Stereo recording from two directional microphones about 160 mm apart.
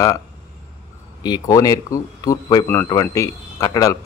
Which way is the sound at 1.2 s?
25° left (ahead or behind).